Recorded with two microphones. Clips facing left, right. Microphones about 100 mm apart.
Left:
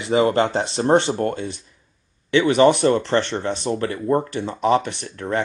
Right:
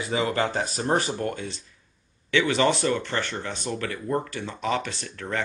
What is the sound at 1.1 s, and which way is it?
Speech, 40° left (ahead or behind).